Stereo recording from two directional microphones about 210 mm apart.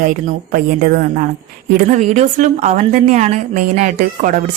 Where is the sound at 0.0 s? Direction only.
40° right (ahead or behind).